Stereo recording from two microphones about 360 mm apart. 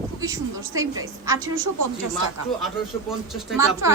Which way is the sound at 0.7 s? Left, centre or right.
Right.